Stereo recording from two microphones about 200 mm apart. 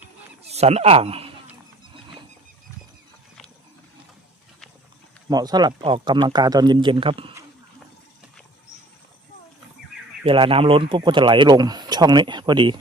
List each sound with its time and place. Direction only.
0.5 s a man's voice: 30° right (ahead or behind)
5.3 s speech: 20° right (ahead or behind)
10.2 s speech: 25° right (ahead or behind)